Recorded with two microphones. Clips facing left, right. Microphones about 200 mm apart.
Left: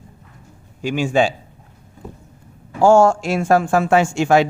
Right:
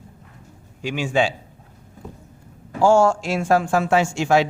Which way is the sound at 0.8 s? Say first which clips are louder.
Left 4 dB; 45° left (ahead or behind).